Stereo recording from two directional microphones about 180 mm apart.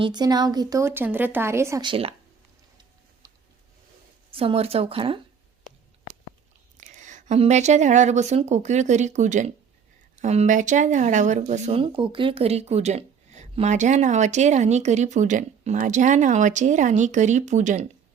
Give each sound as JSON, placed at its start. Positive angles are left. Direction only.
{"t": 0.0, "sound": "speech", "side_deg": -25}
{"t": 3.2, "sound": "a sound", "side_deg": -20}
{"t": 4.3, "sound": "speech", "side_deg": -30}
{"t": 6.7, "sound": "a woman's voice", "side_deg": -40}